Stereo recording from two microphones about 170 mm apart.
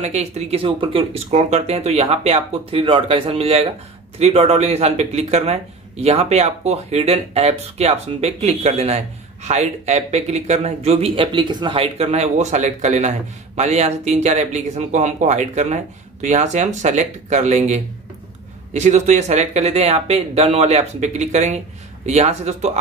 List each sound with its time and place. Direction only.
0.0 s speech: 40° right (ahead or behind)